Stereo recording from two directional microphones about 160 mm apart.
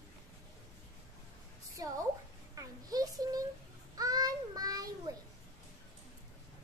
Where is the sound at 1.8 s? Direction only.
25° right (ahead or behind).